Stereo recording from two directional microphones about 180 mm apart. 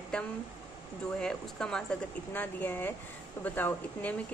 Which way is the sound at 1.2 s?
5° left (ahead or behind).